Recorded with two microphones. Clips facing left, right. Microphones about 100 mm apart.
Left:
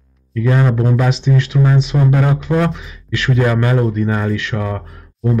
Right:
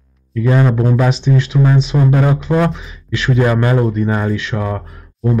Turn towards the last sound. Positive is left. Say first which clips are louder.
# right 1 dB
turn(degrees=-20)  # may be behind; listen again after turning